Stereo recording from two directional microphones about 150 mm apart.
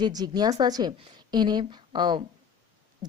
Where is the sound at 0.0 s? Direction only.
25° right (ahead or behind).